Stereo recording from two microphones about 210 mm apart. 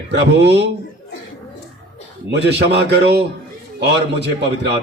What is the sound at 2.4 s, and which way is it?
A man's voice, 55° right (ahead or behind).